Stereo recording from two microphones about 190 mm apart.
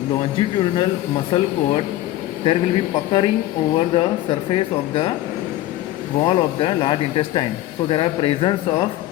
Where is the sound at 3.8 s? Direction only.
25° left (ahead or behind).